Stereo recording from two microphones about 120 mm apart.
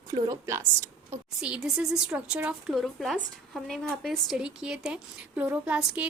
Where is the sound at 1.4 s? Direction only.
5° right (ahead or behind).